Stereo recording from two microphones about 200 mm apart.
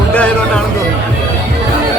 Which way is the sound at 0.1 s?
5° left (ahead or behind).